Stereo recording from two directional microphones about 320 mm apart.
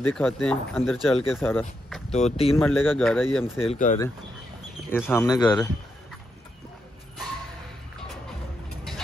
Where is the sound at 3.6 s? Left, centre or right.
Left.